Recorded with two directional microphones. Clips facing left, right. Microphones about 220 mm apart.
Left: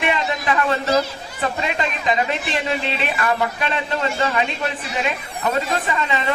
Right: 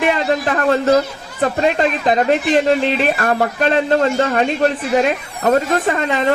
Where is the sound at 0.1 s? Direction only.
50° right (ahead or behind).